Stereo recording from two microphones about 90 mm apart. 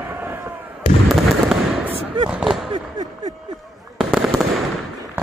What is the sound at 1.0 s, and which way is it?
Fireworks, centre (ahead or behind).